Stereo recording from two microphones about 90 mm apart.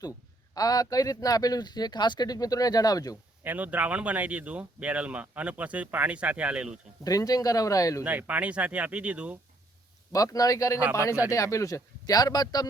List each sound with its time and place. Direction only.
0.5 s speech: 45° left (ahead or behind)
3.4 s speech: 20° right (ahead or behind)
7.0 s speech: 45° left (ahead or behind)
8.0 s speech: 15° right (ahead or behind)
10.1 s speech: 40° left (ahead or behind)